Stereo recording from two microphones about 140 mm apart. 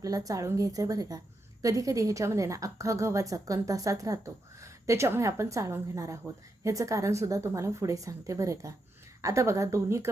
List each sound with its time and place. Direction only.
0.0 s a woman's voice: 25° right (ahead or behind)